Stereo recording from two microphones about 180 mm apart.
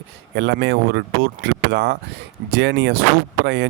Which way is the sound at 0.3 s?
70° right (ahead or behind).